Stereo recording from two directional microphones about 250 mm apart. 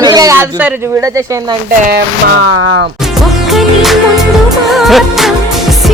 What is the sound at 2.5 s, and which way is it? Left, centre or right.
Speech, right.